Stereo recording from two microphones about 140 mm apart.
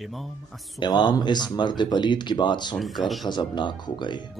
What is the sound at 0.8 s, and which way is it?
Speech, 30° left (ahead or behind).